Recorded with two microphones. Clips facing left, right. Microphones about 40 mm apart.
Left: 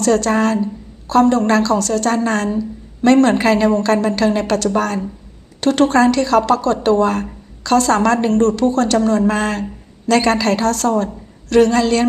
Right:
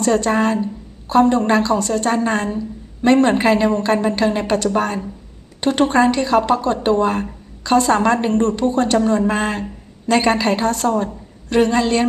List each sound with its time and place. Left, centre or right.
0.0 s a woman's voice: centre